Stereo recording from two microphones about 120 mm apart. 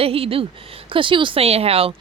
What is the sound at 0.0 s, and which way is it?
Speech, 55° right (ahead or behind).